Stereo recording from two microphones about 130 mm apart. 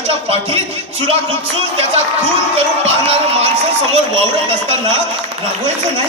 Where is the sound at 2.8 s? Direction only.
50° right (ahead or behind).